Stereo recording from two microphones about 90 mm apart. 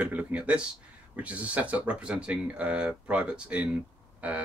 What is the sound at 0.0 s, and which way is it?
Speech, 15° right (ahead or behind).